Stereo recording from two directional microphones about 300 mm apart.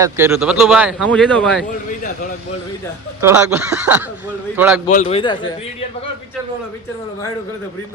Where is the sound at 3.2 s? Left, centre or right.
Centre.